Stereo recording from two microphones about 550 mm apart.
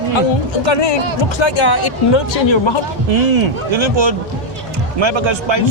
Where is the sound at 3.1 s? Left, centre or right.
Right.